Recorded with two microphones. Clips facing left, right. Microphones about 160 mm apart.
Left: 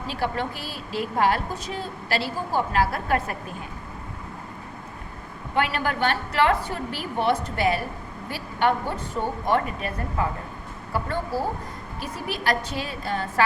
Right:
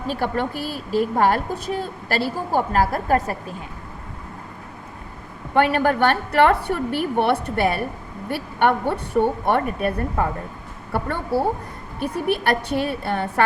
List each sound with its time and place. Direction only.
0.1 s a woman's voice: 50° right (ahead or behind)
5.5 s a woman's voice: 55° right (ahead or behind)